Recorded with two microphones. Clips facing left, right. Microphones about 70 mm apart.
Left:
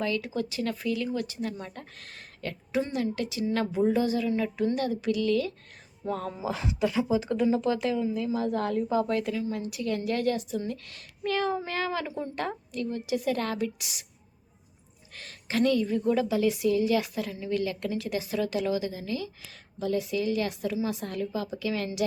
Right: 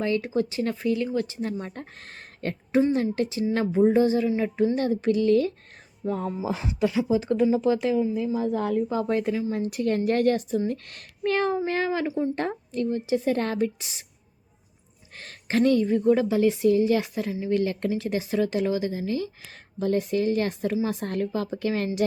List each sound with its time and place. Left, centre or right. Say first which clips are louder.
0.0 s speech: right 5 dB; right
3.5 s a sound: right 5 dB; right
4.4 s speech: right 4 dB; right
6.1 s speech: right 3 dB; centre
7.1 s a sound: right 3 dB; right
8.5 s speech: right 3 dB; centre
8.9 s speech: right 2 dB; right
11.9 s a sound: right 6 dB; right
12.4 s speech: right 4 dB; right
15.1 s a woman's voice: right 5 dB; right